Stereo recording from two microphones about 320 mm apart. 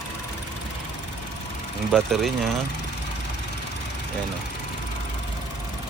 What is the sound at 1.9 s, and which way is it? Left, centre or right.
Speech, centre.